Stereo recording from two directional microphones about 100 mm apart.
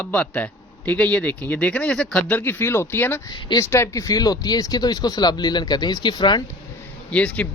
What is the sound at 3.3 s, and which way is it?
Speech, 50° left (ahead or behind).